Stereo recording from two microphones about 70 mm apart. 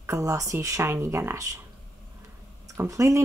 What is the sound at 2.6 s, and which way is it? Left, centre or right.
Speech, right.